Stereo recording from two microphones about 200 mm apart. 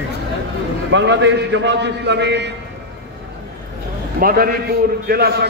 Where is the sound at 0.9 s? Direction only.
60° right (ahead or behind).